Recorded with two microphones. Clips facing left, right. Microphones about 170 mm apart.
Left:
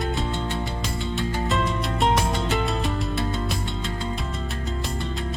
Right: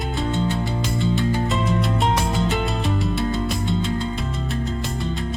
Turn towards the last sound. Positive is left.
turn(degrees=0)  # may be behind; listen again after turning